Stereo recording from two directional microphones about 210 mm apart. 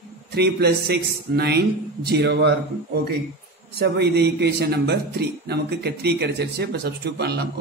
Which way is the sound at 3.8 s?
50° right (ahead or behind).